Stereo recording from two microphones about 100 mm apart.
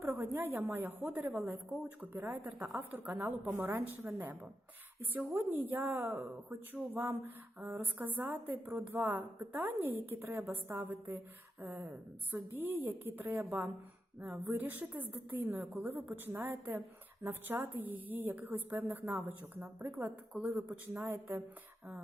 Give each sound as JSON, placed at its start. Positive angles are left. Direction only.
{"t": 0.0, "sound": "a woman's voice", "side_deg": -25}
{"t": 14.4, "sound": "a woman's voice", "side_deg": -20}